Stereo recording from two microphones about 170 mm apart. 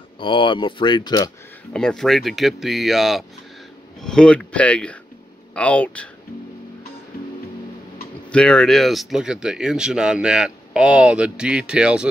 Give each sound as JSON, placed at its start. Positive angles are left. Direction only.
{"t": 0.2, "sound": "speech", "side_deg": 30}
{"t": 1.7, "sound": "speech", "side_deg": 5}
{"t": 8.3, "sound": "speech", "side_deg": 5}